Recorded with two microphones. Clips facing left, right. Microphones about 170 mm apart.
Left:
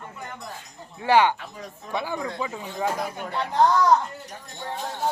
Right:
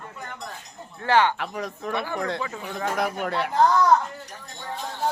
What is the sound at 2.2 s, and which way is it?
Speech, 75° right (ahead or behind).